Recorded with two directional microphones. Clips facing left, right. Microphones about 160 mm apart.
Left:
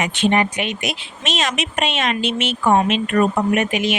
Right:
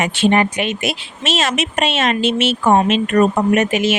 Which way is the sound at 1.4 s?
40° right (ahead or behind).